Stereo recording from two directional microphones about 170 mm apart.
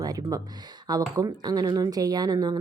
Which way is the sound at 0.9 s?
20° right (ahead or behind).